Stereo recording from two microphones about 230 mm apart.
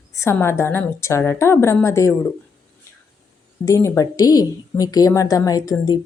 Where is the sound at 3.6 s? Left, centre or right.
Centre.